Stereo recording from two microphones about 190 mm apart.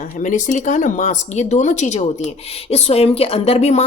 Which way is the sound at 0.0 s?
40° left (ahead or behind).